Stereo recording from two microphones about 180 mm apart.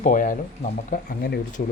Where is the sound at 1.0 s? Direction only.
65° left (ahead or behind).